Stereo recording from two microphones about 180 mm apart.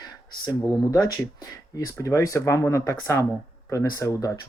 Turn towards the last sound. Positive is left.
turn(degrees=20)  # may be behind; listen again after turning